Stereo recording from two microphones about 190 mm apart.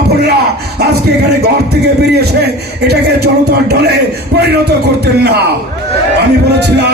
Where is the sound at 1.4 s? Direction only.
60° right (ahead or behind).